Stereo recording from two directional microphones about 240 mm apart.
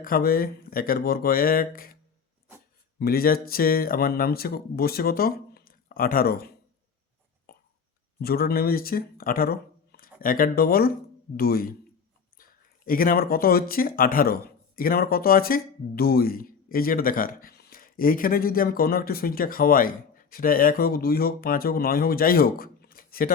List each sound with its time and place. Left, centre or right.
0.0 s speech: left
3.0 s speech: left
7.5 s burping: left
8.2 s speech: left